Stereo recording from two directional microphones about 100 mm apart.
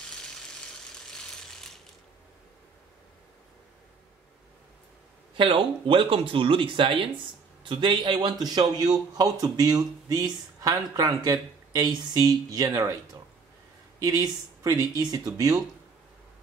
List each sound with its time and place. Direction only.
1.1 s ratchet: 5° left (ahead or behind)
5.4 s speech: 60° right (ahead or behind); by 15.6 s 40° right (ahead or behind)